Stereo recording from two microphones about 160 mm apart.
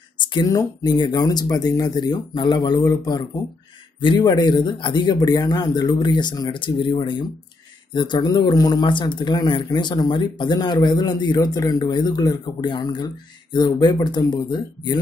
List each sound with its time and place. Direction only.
0.2 s speech: 25° left (ahead or behind)